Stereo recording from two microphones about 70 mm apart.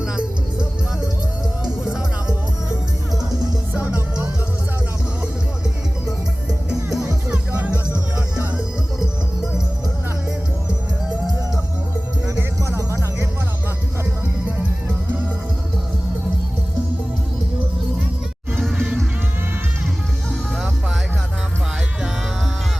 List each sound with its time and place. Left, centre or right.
1.6 s music: centre
3.8 s music: right
6.1 s music: centre
12.2 s music: right
18.6 s music: centre